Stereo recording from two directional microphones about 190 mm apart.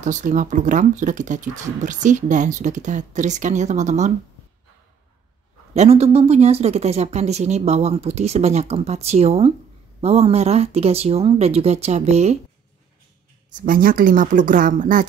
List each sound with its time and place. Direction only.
0.0 s speech: 40° right (ahead or behind)
5.8 s speech: 35° right (ahead or behind)
13.6 s speech: 45° right (ahead or behind)